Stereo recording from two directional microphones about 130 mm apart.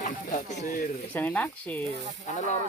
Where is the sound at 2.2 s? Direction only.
65° left (ahead or behind).